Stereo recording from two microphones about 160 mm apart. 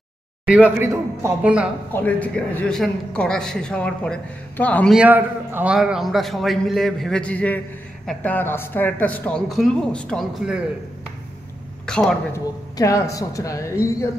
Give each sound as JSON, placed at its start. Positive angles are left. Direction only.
{"t": 0.5, "sound": "a man's voice", "side_deg": -10}
{"t": 1.9, "sound": "a man's voice", "side_deg": 10}
{"t": 4.9, "sound": "a man's voice", "side_deg": -10}
{"t": 11.8, "sound": "a man's voice", "side_deg": 5}
{"t": 12.7, "sound": "a man's voice", "side_deg": 20}